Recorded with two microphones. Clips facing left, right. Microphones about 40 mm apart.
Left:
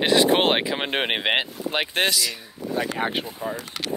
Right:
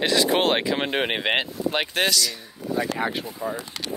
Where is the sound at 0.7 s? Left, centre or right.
Centre.